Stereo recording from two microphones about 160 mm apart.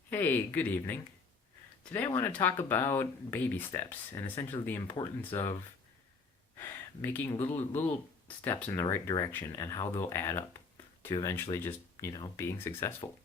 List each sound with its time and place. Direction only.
0.1 s speech: 15° left (ahead or behind)
6.6 s speech: 10° left (ahead or behind)
8.8 s speech: 20° left (ahead or behind)